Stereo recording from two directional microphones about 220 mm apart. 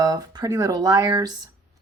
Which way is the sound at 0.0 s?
20° right (ahead or behind).